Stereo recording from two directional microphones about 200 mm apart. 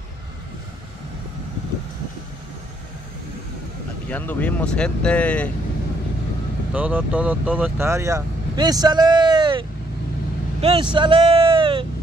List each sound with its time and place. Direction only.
4.1 s speech: 10° left (ahead or behind)
6.7 s speech: 5° right (ahead or behind); by 11.8 s 25° right (ahead or behind)